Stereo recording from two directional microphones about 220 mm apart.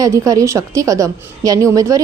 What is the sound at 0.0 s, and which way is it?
A woman's voice, 15° right (ahead or behind).